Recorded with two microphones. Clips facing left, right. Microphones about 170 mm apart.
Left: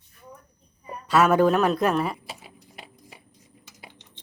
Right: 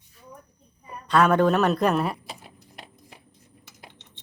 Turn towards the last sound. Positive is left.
turn(degrees=5)  # may be behind; listen again after turning